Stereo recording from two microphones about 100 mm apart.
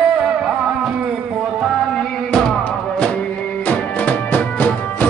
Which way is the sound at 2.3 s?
5° left (ahead or behind).